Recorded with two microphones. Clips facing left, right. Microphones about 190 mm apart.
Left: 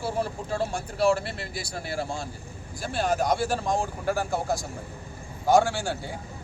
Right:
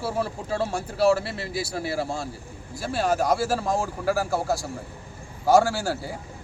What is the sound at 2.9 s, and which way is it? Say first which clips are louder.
Speech: right 2 dB; 30° right (ahead or behind).